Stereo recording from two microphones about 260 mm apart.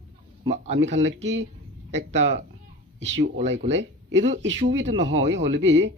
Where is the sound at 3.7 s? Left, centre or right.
Right.